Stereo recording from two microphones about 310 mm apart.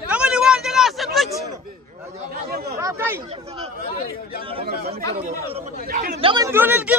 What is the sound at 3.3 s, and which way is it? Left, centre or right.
Speech, centre.